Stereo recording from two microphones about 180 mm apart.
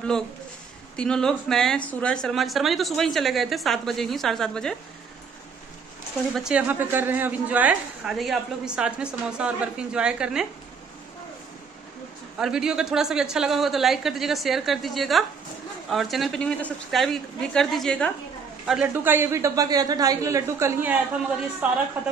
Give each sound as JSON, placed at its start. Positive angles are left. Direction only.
{"t": 0.9, "sound": "a woman's voice", "side_deg": 5}
{"t": 6.3, "sound": "a woman's voice", "side_deg": -5}
{"t": 12.4, "sound": "a woman's voice", "side_deg": -5}
{"t": 18.7, "sound": "a man's voice", "side_deg": -10}